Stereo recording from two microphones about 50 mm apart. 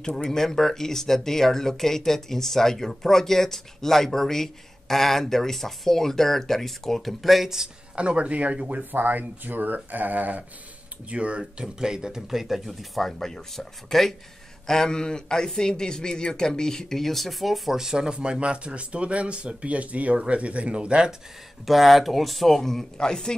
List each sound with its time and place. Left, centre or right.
0.2 s speech: centre
7.9 s speech: right
8.9 s speech: right
11.1 s a man's voice: right
21.6 s speech: centre